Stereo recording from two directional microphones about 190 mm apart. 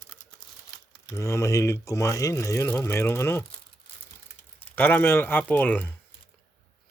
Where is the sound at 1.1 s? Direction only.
15° left (ahead or behind).